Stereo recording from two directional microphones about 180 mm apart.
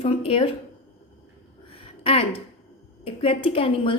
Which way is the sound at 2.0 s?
35° left (ahead or behind).